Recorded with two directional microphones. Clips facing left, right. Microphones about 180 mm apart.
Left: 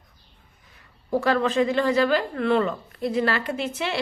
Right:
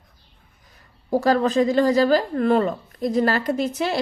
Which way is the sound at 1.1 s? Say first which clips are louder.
Right 3 dB; 40° right (ahead or behind).